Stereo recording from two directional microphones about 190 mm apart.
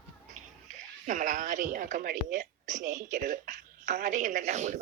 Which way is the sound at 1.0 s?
45° right (ahead or behind).